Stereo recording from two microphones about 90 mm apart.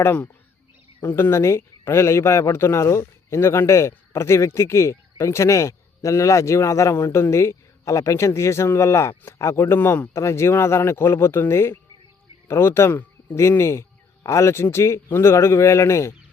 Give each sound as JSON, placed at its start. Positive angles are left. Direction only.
{"t": 0.0, "sound": "speech", "side_deg": 25}